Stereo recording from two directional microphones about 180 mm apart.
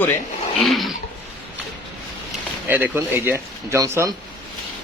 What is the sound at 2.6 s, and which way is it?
Speech, 10° right (ahead or behind).